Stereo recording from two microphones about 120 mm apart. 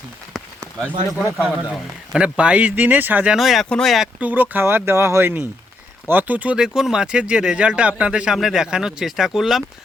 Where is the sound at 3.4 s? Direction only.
Centre (ahead or behind).